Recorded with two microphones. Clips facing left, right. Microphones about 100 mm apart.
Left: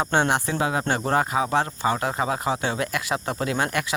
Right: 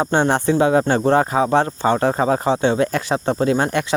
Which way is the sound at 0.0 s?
30° right (ahead or behind).